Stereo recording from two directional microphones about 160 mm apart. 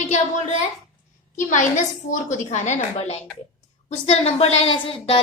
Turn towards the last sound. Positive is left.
turn(degrees=35)  # may be behind; listen again after turning